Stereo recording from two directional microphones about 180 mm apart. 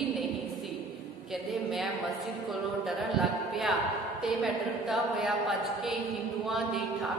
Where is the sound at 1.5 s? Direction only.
Centre (ahead or behind).